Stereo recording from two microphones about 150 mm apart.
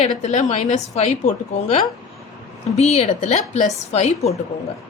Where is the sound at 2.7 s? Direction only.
45° left (ahead or behind).